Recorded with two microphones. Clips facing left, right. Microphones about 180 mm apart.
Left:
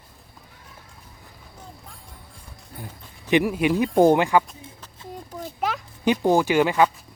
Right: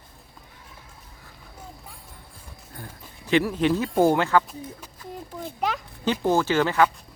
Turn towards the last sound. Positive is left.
turn(degrees=15)  # may be behind; listen again after turning